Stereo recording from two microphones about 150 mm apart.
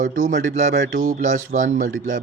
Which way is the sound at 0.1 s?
60° right (ahead or behind).